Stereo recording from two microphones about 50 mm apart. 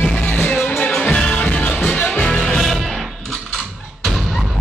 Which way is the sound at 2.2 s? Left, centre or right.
Centre.